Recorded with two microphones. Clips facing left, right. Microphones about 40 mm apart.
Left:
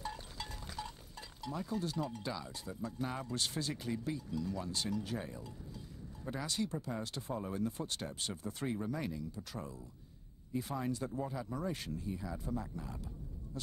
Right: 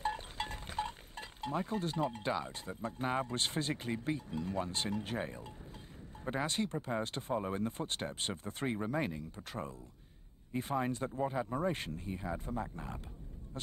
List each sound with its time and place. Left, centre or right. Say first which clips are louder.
0.0 s speech: right 7 dB; right